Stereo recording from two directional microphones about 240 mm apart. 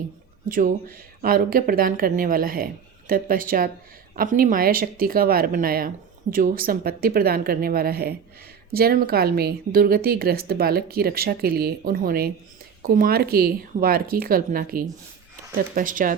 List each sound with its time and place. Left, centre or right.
0.4 s a woman's voice: right